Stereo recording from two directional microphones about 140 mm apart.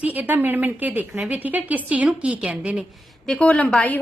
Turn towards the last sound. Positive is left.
turn(degrees=10)  # may be behind; listen again after turning